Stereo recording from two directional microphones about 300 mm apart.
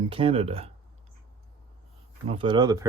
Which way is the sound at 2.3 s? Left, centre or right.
Centre.